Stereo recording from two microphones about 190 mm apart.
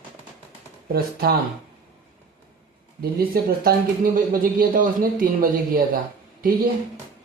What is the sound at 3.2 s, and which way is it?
A man's voice, 50° right (ahead or behind).